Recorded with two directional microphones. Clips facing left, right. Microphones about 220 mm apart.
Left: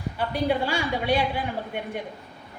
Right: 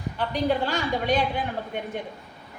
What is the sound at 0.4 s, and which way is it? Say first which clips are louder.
Speech: even; 10° left (ahead or behind).